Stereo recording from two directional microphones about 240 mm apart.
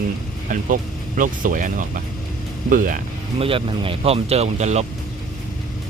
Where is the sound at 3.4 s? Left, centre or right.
Right.